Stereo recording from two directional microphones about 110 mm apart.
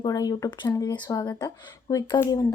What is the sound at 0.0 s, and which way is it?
A woman's voice, 35° left (ahead or behind).